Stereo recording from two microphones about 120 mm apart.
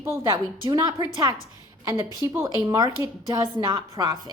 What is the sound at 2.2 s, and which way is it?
A woman's voice, 30° right (ahead or behind).